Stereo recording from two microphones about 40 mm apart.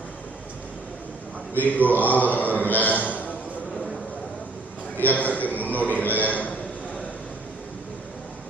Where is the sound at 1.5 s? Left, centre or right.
Left.